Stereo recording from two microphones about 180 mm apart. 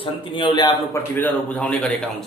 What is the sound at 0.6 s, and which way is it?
A man's voice, 10° left (ahead or behind).